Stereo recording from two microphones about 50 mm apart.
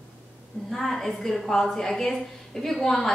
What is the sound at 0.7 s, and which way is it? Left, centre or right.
A woman's voice, centre.